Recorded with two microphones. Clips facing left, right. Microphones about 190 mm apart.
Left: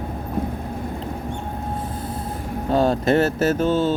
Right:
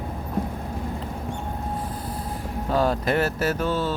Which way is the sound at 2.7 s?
25° left (ahead or behind).